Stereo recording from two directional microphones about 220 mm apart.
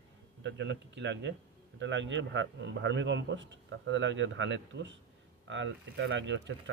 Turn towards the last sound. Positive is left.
turn(degrees=-55)  # may be behind; listen again after turning